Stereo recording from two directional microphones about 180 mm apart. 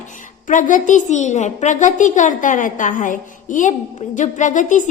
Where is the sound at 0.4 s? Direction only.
45° left (ahead or behind).